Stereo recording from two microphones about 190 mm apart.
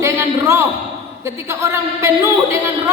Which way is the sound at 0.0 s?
15° right (ahead or behind).